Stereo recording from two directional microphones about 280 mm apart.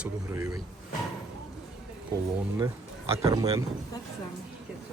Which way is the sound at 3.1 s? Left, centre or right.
Centre.